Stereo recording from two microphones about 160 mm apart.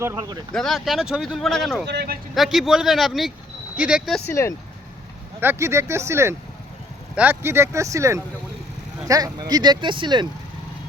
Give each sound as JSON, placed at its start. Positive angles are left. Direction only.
{"t": 0.0, "sound": "speech", "side_deg": -20}
{"t": 0.5, "sound": "a man's voice", "side_deg": 0}
{"t": 1.9, "sound": "speech", "side_deg": -90}
{"t": 2.3, "sound": "a man's voice", "side_deg": 0}
{"t": 4.3, "sound": "speech", "side_deg": 15}
{"t": 5.4, "sound": "speech", "side_deg": -15}